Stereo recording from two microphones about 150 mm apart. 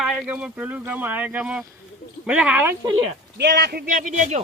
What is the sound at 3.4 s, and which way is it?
A man's voice, 90° right.